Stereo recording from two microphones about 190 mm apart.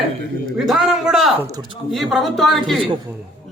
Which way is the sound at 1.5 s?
20° right (ahead or behind).